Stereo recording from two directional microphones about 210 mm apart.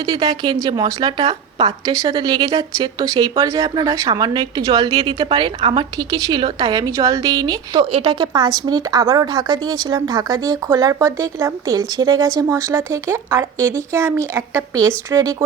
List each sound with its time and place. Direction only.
0.0 s a woman's voice: 20° right (ahead or behind)